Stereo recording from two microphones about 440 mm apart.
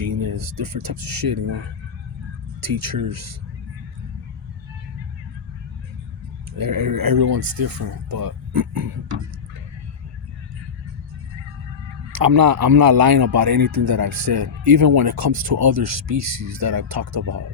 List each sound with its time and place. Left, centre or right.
0.1 s speech: right
2.6 s speech: right
6.6 s speech: right
12.1 s speech: right
15.7 s speech: right